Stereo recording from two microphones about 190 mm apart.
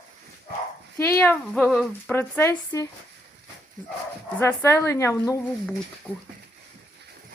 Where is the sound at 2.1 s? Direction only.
10° left (ahead or behind).